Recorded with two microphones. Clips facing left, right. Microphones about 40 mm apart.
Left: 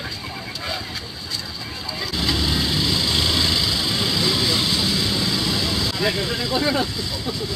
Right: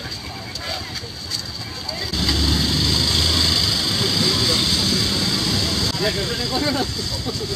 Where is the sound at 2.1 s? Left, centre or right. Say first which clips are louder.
Right 1 dB; centre.